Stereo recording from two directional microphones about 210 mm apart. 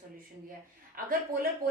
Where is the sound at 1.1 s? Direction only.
45° right (ahead or behind).